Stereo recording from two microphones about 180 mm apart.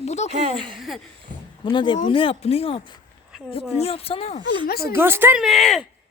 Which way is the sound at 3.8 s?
35° left (ahead or behind).